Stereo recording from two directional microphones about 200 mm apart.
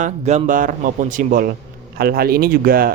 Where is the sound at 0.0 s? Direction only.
35° right (ahead or behind).